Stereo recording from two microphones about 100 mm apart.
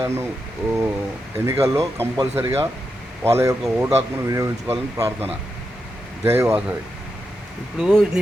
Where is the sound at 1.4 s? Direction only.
30° right (ahead or behind).